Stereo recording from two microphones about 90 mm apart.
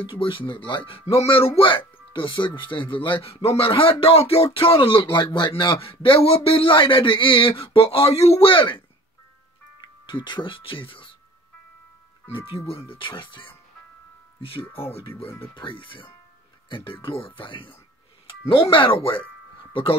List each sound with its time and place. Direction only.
0.0 s speech: 70° left (ahead or behind)
10.0 s speech: 60° left (ahead or behind)
13.0 s speech: 65° left (ahead or behind)
14.4 s speech: 90° left
15.2 s speech: 25° left (ahead or behind)
15.5 s speech: 70° left (ahead or behind)
18.5 s speech: 80° left